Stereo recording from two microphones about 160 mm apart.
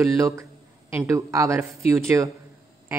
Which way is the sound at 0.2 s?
15° right (ahead or behind).